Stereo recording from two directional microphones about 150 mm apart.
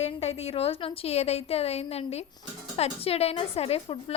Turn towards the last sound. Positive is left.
turn(degrees=40)  # may be behind; listen again after turning